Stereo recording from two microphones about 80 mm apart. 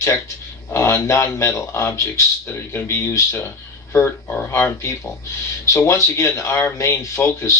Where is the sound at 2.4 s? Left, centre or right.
Left.